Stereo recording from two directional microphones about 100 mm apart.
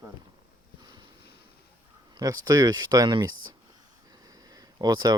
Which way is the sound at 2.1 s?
35° right (ahead or behind).